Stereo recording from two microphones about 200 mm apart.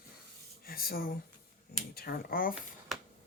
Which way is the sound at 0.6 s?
50° left (ahead or behind).